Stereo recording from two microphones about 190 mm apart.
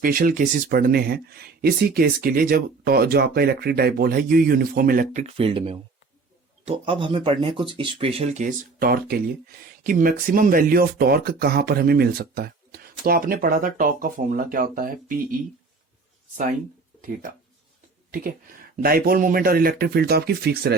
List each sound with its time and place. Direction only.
0.0 s speech: 50° right (ahead or behind)
18.1 s speech: 50° right (ahead or behind)